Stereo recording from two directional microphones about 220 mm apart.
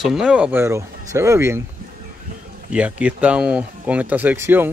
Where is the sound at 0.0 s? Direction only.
Centre (ahead or behind).